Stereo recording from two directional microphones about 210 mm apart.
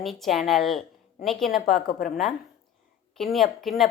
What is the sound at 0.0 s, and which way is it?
Speech, centre (ahead or behind).